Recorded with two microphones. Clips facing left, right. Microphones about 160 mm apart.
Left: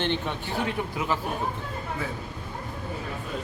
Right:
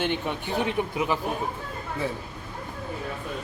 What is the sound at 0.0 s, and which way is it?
A man's voice, 10° right (ahead or behind).